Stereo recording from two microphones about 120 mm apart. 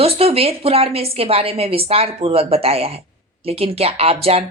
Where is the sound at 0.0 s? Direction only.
55° right (ahead or behind).